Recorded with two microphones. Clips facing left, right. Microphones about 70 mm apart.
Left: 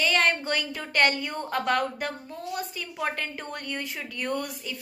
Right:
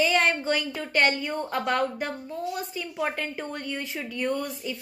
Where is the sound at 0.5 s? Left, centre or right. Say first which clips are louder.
Right 2 dB; centre.